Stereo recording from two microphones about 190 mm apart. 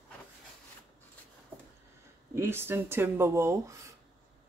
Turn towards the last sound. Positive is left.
turn(degrees=-15)  # may be behind; listen again after turning